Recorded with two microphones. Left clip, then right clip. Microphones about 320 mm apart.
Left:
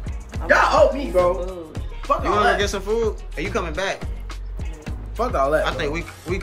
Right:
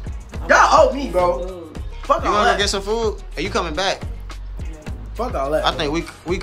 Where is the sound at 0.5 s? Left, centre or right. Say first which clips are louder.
Right 3 dB; right.